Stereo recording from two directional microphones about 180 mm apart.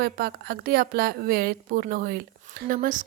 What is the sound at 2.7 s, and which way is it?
Speech, 50° right (ahead or behind).